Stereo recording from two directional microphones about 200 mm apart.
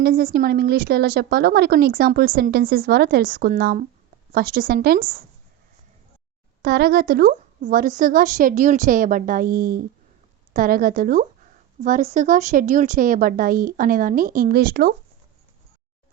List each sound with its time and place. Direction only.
0.0 s a woman's voice: 50° right (ahead or behind)
6.6 s a woman's voice: 55° right (ahead or behind)